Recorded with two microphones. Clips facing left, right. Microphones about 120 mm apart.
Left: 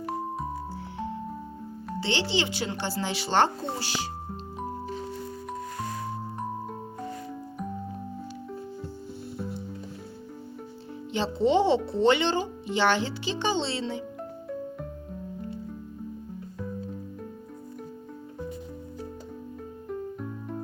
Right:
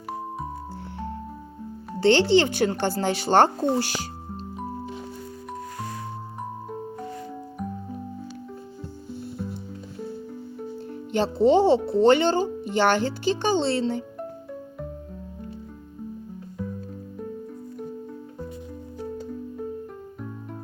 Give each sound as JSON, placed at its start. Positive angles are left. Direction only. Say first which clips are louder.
{"t": 2.0, "sound": "speech", "louder": "right 10 dB", "side_deg": -55}
{"t": 11.1, "sound": "speech", "louder": "right 5 dB", "side_deg": -45}